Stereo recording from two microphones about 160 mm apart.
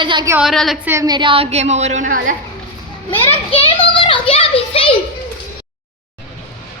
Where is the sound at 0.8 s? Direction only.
15° right (ahead or behind); by 2.3 s 55° right (ahead or behind).